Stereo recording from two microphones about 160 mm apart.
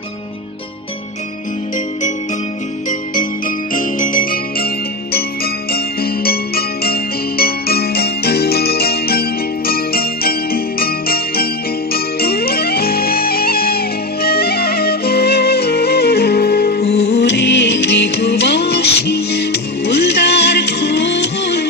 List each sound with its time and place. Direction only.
2.9 s jingle bell: 55° left (ahead or behind)
11.9 s music: 75° left (ahead or behind)